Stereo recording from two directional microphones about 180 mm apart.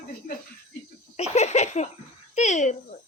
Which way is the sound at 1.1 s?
35° left (ahead or behind).